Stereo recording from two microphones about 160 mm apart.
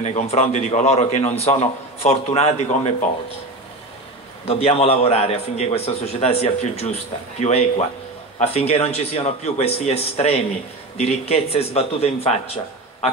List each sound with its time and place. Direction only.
0.0 s a man's voice: 45° left (ahead or behind)
4.5 s a man's voice: 40° left (ahead or behind)